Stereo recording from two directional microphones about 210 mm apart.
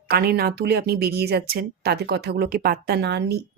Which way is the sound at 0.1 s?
50° right (ahead or behind).